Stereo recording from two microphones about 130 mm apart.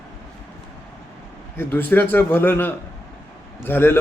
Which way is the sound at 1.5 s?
15° left (ahead or behind).